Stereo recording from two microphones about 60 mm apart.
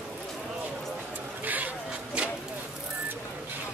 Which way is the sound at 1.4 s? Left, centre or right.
Right.